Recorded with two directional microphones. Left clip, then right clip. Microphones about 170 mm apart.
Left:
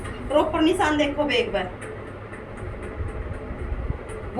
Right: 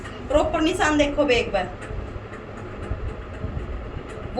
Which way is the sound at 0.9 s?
40° right (ahead or behind).